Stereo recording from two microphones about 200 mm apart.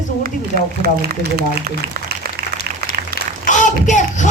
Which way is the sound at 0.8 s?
50° right (ahead or behind).